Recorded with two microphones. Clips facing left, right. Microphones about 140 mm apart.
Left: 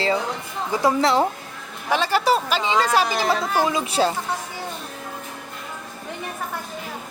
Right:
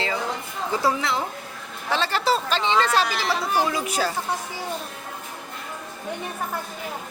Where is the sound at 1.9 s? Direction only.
10° left (ahead or behind).